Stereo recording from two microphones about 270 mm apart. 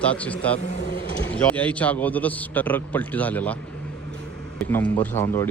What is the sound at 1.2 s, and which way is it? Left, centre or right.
A man's voice, centre.